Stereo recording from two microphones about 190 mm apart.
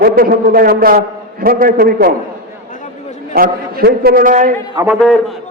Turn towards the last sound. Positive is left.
turn(degrees=0)  # may be behind; listen again after turning